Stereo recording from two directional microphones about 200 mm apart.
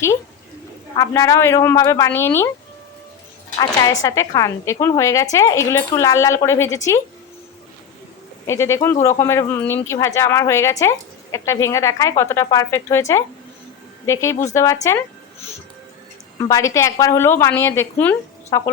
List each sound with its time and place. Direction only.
0.9 s speech: 15° left (ahead or behind)
3.6 s a woman's voice: 20° left (ahead or behind)
8.4 s speech: 15° left (ahead or behind)
16.4 s speech: 15° left (ahead or behind)